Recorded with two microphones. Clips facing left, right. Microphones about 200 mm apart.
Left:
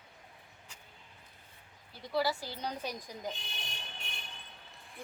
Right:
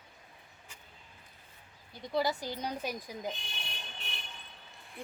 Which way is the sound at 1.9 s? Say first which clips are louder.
Right 1 dB; 20° right (ahead or behind).